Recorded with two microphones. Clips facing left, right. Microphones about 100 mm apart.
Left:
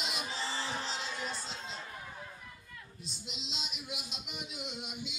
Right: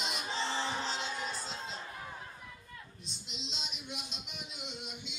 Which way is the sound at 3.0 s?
Centre (ahead or behind).